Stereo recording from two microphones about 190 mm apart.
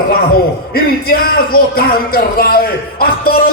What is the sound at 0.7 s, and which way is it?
Speech, 50° left (ahead or behind).